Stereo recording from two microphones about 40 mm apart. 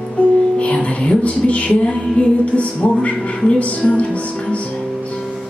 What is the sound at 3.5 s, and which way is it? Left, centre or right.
Speech, left.